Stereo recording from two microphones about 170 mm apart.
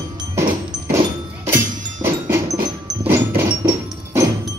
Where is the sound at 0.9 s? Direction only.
20° right (ahead or behind).